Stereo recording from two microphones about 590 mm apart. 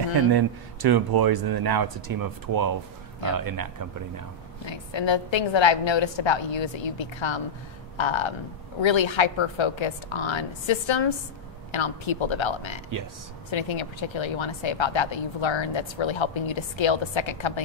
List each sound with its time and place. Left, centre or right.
0.3 s speech: right
4.6 s speech: left